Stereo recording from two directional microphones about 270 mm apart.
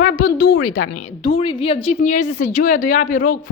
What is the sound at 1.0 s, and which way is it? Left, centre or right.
A woman's voice, left.